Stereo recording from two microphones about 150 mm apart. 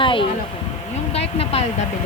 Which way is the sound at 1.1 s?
40° left (ahead or behind).